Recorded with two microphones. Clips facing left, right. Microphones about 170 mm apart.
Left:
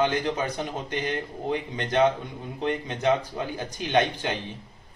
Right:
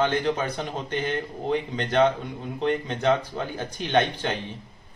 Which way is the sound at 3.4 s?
10° left (ahead or behind).